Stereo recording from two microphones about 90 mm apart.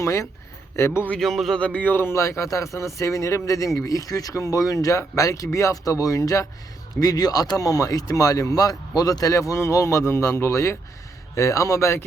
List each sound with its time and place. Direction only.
0.0 s a man's voice: 35° left (ahead or behind)
1.2 s speech: centre (ahead or behind)
1.5 s speech: 15° left (ahead or behind); by 12.0 s 30° left (ahead or behind)